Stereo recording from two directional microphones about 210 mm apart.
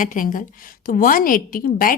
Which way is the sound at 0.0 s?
40° left (ahead or behind).